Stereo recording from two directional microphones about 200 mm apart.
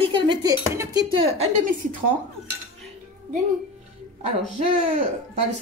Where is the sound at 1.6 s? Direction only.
40° right (ahead or behind).